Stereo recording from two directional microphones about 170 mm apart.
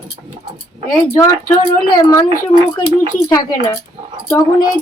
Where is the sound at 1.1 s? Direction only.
15° left (ahead or behind).